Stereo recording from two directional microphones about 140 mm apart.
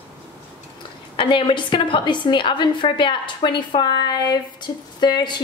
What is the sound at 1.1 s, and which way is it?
A woman's voice, 35° left (ahead or behind).